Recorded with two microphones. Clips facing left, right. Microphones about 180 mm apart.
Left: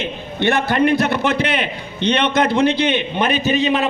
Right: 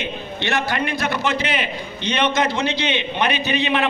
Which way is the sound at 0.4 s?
55° left (ahead or behind).